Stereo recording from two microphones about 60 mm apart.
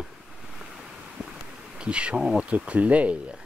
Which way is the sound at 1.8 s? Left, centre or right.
Centre.